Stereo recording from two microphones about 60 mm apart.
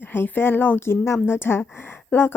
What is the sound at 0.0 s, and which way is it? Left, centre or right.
Speech, left.